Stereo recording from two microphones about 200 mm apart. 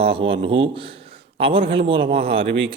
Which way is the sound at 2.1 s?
30° right (ahead or behind).